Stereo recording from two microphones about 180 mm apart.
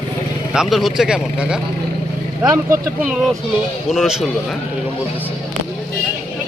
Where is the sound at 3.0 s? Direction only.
Centre (ahead or behind).